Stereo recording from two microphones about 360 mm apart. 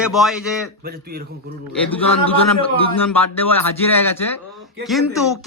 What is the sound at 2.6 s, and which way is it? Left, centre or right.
Speech, centre.